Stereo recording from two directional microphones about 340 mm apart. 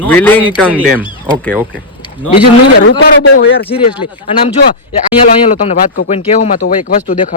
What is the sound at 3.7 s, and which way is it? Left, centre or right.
Speech, centre.